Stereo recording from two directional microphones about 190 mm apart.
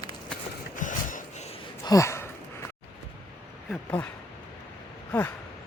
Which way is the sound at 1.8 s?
15° left (ahead or behind).